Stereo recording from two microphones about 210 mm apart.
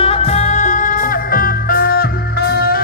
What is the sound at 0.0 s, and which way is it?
Music, 30° left (ahead or behind).